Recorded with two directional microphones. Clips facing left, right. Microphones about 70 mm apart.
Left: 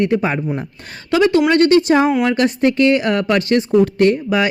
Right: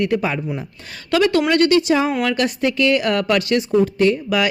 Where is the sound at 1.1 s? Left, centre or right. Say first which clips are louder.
Left 3 dB; left.